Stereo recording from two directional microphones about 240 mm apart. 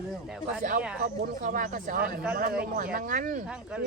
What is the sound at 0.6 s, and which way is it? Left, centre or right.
Speech, right.